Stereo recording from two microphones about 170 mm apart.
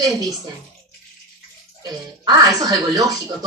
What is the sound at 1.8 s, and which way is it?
Speech, 25° right (ahead or behind).